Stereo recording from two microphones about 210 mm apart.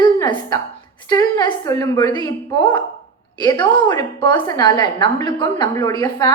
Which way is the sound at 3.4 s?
20° left (ahead or behind).